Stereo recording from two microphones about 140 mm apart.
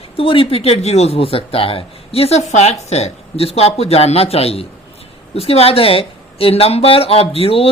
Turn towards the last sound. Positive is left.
turn(degrees=45)  # may be behind; listen again after turning